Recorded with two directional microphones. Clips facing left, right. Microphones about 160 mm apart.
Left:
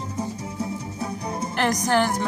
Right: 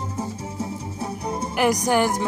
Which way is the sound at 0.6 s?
25° right (ahead or behind).